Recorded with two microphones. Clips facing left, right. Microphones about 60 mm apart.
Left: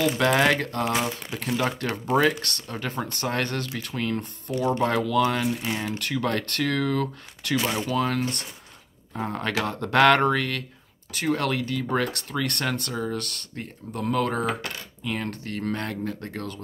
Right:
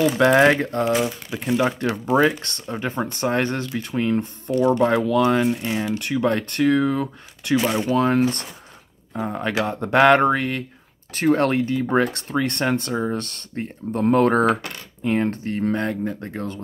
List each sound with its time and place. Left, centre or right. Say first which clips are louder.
0.2 s speech: right 7 dB; right
9.2 s speech: right 4 dB; centre
11.1 s speech: right 7 dB; right
15.0 s speech: right 9 dB; right